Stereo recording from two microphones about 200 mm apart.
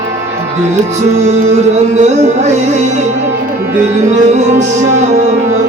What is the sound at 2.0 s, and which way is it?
Music, 35° right (ahead or behind).